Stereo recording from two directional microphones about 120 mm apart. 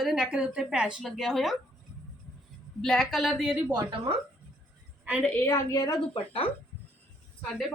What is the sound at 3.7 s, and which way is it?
Speech, 45° right (ahead or behind).